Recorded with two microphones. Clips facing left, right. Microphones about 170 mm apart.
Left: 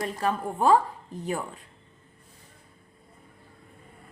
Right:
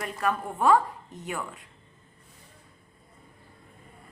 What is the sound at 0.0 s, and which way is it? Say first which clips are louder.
A woman's voice: left 1 dB; 30° left (ahead or behind).